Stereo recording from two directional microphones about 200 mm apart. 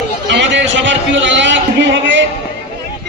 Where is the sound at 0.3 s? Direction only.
65° right (ahead or behind).